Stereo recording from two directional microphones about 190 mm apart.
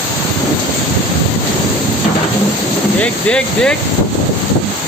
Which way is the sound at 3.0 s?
5° left (ahead or behind).